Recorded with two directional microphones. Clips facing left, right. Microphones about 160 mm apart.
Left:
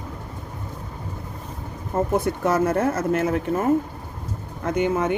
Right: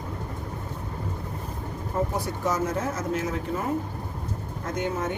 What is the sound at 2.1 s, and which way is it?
Speech, 60° left (ahead or behind).